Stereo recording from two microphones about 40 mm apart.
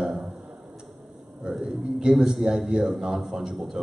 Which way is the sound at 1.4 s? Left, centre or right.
Centre.